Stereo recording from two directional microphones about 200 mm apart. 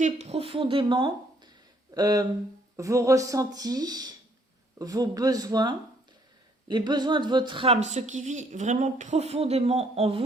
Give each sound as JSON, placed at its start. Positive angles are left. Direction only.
{"t": 0.0, "sound": "speech", "side_deg": -35}
{"t": 7.9, "sound": "speech", "side_deg": -35}